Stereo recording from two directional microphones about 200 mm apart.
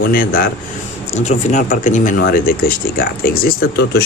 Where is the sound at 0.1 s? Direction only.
45° left (ahead or behind).